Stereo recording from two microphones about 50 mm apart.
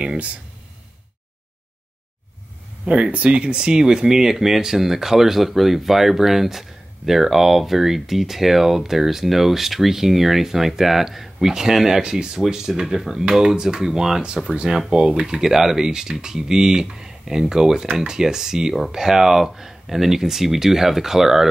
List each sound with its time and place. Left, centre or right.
0.0 s speech: right
2.8 s speech: right; by 21.5 s centre